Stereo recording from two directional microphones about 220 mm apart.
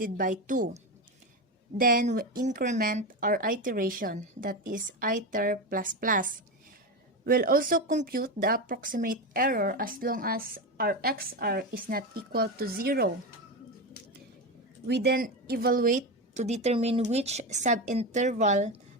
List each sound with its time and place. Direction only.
0.0 s speech: 35° right (ahead or behind)
1.8 s speech: 40° right (ahead or behind)
14.8 s speech: 50° right (ahead or behind); by 18.8 s 30° right (ahead or behind)